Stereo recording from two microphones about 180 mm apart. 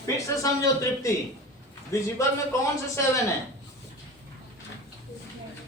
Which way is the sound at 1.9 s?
15° left (ahead or behind).